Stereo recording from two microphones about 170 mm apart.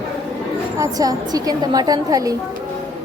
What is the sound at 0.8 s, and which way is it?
A woman's voice, 20° right (ahead or behind).